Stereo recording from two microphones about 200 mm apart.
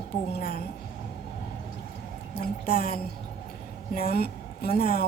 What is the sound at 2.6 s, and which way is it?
A woman's voice, 45° left (ahead or behind).